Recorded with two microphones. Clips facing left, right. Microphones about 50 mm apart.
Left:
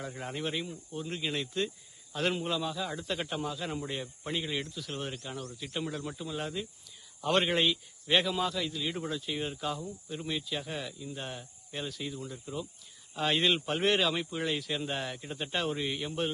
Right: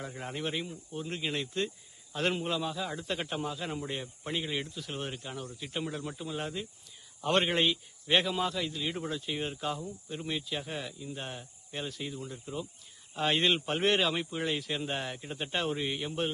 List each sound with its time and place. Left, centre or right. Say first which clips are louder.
0.0 s a man's voice: even; centre